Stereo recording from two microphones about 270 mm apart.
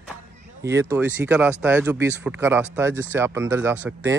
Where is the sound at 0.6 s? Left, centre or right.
Centre.